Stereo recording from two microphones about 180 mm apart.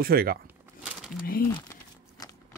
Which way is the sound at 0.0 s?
55° right (ahead or behind).